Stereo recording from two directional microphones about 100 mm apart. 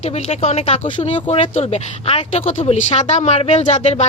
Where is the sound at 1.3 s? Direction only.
80° left.